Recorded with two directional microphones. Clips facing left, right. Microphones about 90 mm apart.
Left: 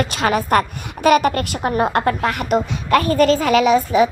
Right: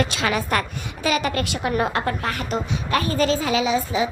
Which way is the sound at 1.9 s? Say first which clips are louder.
Left 6 dB; 50° left (ahead or behind).